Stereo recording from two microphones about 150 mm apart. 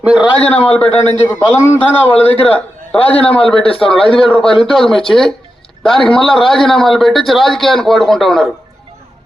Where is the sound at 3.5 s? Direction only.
35° left (ahead or behind).